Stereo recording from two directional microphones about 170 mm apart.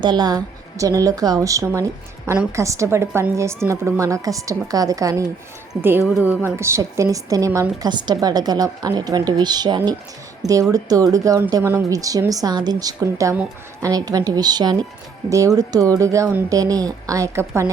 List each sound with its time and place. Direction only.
0.0 s a woman's voice: 25° right (ahead or behind)
6.1 s a woman's voice: 5° right (ahead or behind)